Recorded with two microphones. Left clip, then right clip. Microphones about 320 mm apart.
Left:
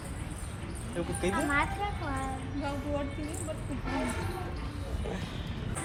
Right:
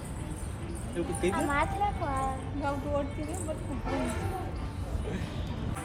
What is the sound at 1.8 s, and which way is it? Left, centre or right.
Vehicle, right.